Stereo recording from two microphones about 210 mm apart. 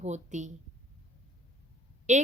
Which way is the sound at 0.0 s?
35° right (ahead or behind).